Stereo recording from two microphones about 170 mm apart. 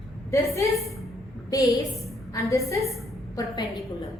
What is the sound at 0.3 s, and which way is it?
A woman's voice, 15° left (ahead or behind).